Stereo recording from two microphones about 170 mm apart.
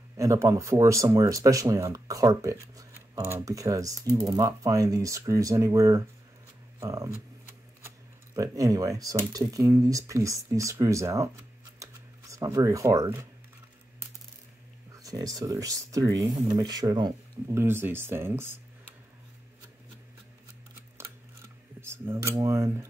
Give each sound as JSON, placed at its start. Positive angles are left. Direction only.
{"t": 0.2, "sound": "speech", "side_deg": -20}
{"t": 8.4, "sound": "speech", "side_deg": -20}
{"t": 11.8, "sound": "a sound", "side_deg": -20}
{"t": 15.0, "sound": "speech", "side_deg": -20}
{"t": 17.6, "sound": "speech", "side_deg": -15}
{"t": 21.0, "sound": "a sound", "side_deg": -15}
{"t": 22.4, "sound": "speech", "side_deg": -20}